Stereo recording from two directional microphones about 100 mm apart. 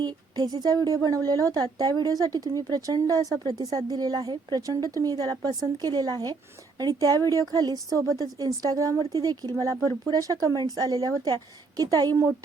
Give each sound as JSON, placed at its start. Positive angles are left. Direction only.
{"t": 0.0, "sound": "a woman's voice", "side_deg": -45}